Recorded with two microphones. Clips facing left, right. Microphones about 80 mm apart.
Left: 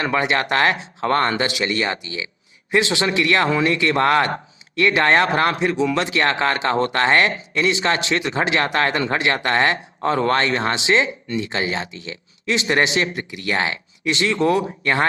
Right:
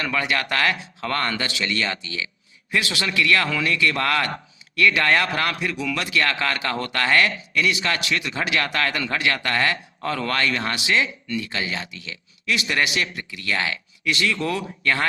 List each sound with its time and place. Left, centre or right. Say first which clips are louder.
0.0 s speech: left 4 dB; left